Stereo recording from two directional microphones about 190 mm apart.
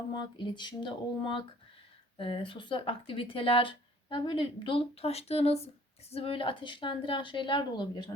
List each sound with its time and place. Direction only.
0.1 s speech: 25° left (ahead or behind)